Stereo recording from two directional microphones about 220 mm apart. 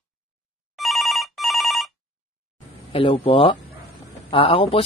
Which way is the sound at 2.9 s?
25° left (ahead or behind).